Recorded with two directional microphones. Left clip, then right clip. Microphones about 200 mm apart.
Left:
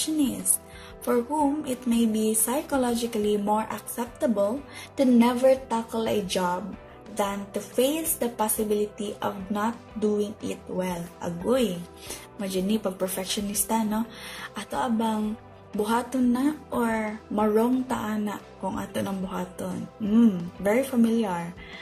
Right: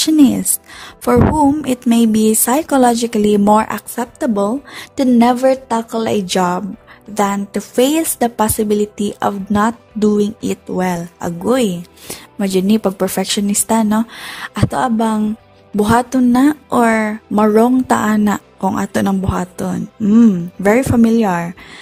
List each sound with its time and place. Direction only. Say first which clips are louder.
1.6 s speech: right 12 dB; 45° right (ahead or behind)